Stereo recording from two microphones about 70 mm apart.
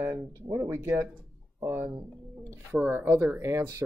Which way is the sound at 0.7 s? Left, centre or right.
Right.